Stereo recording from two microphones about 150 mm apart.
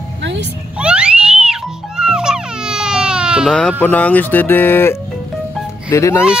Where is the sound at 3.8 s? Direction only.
10° left (ahead or behind).